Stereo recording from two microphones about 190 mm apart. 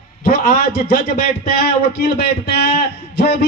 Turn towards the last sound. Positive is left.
turn(degrees=55)  # may be behind; listen again after turning